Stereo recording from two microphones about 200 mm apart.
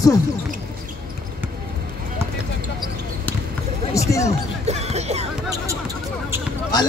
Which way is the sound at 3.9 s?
15° left (ahead or behind).